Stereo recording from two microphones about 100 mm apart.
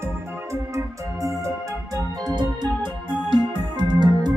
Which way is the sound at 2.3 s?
45° right (ahead or behind).